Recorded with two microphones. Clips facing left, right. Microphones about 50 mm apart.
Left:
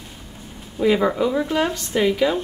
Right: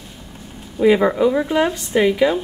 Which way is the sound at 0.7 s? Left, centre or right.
Centre.